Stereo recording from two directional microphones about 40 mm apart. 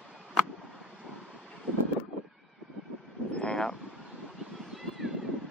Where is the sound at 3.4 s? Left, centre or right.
Centre.